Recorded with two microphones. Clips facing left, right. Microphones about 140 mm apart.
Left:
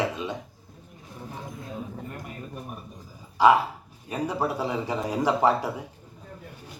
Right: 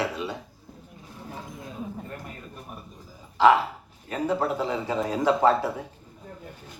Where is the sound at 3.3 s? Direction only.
15° left (ahead or behind).